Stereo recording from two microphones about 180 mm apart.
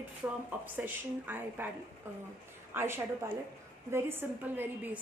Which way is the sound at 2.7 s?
10° right (ahead or behind).